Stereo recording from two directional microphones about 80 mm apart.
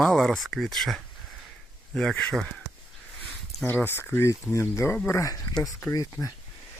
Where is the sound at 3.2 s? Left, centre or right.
Left.